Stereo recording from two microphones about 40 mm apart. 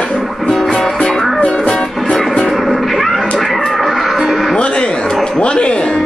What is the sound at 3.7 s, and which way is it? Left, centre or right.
Music, centre.